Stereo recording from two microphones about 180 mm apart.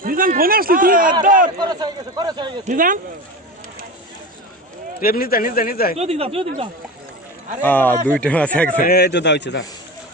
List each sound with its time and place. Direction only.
0.0 s speech: 50° right (ahead or behind)
1.5 s a man's voice: 25° right (ahead or behind)
2.6 s speech: 50° right (ahead or behind)
5.0 s speech: 55° left (ahead or behind)
6.0 s speech: 35° right (ahead or behind)
7.6 s speech: 10° left (ahead or behind)
8.8 s speech: 60° left (ahead or behind)